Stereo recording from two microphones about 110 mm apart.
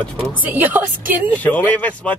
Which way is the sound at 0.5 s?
15° right (ahead or behind).